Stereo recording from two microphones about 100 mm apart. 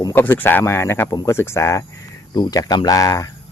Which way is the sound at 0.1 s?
20° left (ahead or behind).